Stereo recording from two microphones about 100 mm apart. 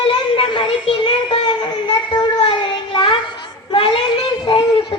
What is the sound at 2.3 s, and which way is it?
Child singing, 60° left (ahead or behind).